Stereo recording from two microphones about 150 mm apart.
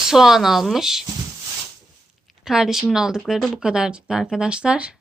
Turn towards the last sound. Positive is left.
turn(degrees=-5)  # may be behind; listen again after turning